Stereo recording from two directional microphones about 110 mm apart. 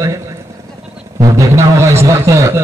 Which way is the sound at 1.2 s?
25° right (ahead or behind).